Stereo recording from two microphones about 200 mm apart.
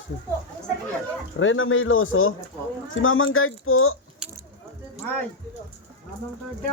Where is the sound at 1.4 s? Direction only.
75° left (ahead or behind).